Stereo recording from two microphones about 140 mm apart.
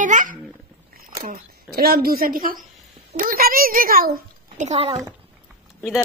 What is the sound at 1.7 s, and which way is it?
Speech, 90° right.